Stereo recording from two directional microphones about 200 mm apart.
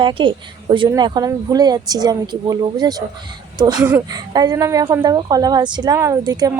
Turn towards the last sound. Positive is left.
turn(degrees=-15)  # may be behind; listen again after turning